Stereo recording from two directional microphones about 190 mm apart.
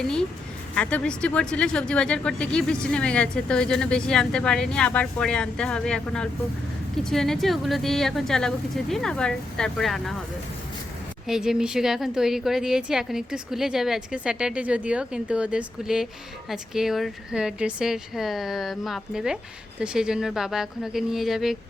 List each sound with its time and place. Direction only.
0.0 s a woman's voice: 5° left (ahead or behind)
11.3 s a woman's voice: 5° right (ahead or behind)